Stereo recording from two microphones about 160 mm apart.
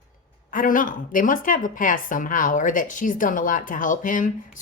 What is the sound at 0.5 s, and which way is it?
A woman's voice, 60° left (ahead or behind).